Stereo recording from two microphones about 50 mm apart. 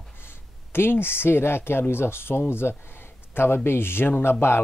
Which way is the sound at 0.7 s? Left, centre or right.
Left.